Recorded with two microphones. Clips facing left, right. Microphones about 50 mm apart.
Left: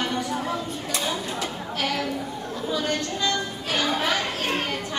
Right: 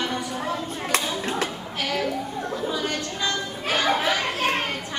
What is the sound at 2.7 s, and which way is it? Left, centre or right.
Speech, centre.